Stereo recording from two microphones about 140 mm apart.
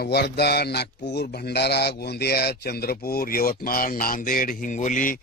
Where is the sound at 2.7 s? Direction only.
90° left; by 5.2 s 70° left (ahead or behind).